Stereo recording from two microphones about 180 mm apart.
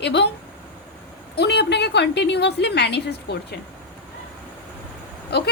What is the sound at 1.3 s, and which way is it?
A woman's voice, 70° left (ahead or behind).